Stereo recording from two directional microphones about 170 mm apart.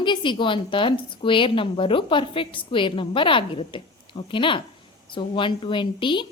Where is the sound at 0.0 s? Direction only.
30° left (ahead or behind).